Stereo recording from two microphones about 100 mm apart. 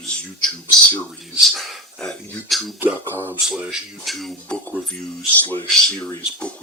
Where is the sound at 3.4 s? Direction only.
5° right (ahead or behind).